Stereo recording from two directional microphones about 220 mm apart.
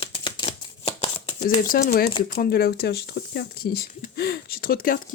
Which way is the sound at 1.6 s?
40° left (ahead or behind).